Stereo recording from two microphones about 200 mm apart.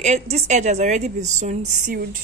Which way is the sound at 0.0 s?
35° right (ahead or behind).